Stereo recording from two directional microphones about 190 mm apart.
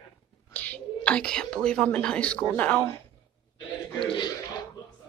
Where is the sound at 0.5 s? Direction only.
10° left (ahead or behind).